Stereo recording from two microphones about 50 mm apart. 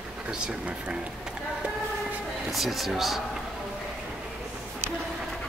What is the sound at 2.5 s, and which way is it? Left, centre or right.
Speech, centre.